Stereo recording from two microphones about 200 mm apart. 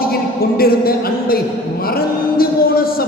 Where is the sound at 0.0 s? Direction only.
50° left (ahead or behind).